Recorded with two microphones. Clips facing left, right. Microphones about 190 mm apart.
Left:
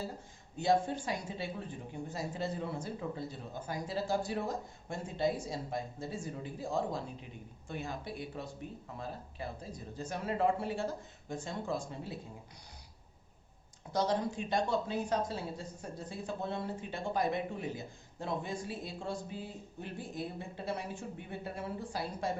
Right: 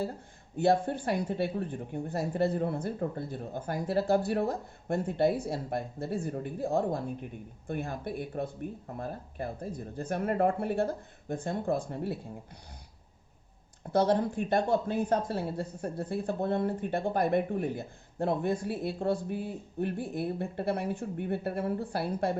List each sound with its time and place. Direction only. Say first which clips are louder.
0.5 s speech: right 4 dB; 60° right (ahead or behind)
13.9 s speech: right 6 dB; 55° right (ahead or behind)